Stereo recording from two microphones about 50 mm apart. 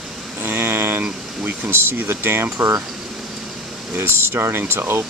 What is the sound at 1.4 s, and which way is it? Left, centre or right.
Speech, right.